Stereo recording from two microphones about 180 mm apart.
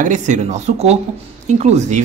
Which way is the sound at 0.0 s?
45° right (ahead or behind).